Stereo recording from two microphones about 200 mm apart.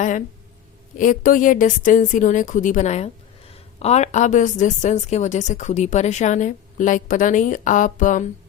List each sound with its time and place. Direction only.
0.9 s a woman's voice: 40° left (ahead or behind)